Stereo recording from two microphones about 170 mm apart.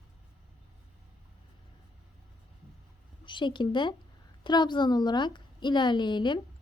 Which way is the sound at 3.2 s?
30° left (ahead or behind).